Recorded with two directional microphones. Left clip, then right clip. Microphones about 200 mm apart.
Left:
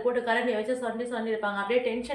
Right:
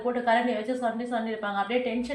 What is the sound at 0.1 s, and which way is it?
A woman's voice, 15° left (ahead or behind).